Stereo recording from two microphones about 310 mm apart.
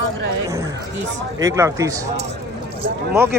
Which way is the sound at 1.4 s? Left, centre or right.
Centre.